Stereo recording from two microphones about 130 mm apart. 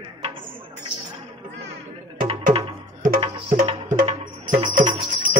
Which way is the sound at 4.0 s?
85° right.